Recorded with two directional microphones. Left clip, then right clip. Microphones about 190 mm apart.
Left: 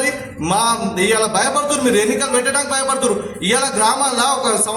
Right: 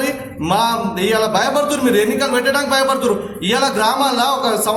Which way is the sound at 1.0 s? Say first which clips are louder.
Right 1 dB; 5° right (ahead or behind).